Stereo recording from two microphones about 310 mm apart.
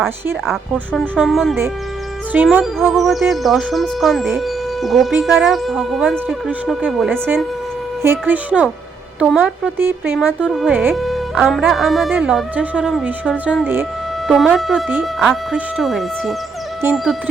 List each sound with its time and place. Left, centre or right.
0.0 s speech: centre